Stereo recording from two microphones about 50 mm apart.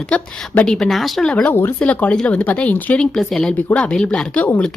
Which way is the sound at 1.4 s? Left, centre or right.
Left.